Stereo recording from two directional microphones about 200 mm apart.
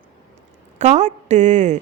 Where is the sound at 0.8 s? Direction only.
35° right (ahead or behind).